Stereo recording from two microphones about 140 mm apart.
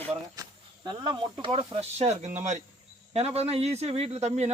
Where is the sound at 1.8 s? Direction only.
50° right (ahead or behind).